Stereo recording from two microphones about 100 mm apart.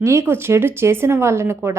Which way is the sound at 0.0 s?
25° right (ahead or behind).